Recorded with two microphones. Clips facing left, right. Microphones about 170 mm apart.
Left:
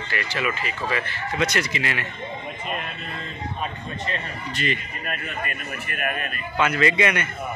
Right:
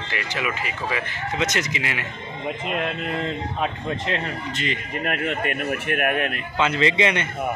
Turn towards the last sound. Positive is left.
turn(degrees=-25)  # may be behind; listen again after turning